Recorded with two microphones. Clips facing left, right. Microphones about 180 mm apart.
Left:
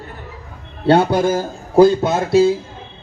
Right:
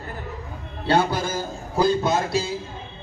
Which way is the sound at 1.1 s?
60° left (ahead or behind).